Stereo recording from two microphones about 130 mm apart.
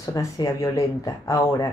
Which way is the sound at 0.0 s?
25° left (ahead or behind).